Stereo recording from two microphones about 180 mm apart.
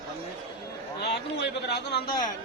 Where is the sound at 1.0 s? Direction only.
70° left (ahead or behind).